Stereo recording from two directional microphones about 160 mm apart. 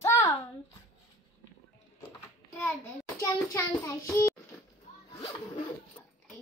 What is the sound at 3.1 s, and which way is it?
Child singing, 20° left (ahead or behind).